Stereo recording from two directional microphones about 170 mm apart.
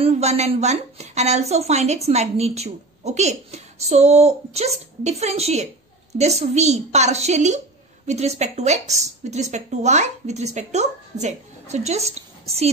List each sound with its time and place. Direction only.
0.0 s a woman's voice: 40° right (ahead or behind)